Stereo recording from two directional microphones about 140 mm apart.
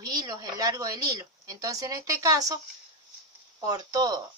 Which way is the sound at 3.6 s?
25° right (ahead or behind).